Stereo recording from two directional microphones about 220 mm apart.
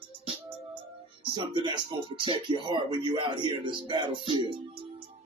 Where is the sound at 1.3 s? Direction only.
20° right (ahead or behind).